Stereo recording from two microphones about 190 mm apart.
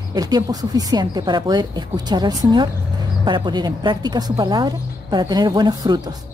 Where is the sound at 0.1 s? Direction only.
20° right (ahead or behind).